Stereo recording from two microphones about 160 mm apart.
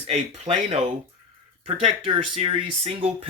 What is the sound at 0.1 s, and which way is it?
Speech, 40° right (ahead or behind).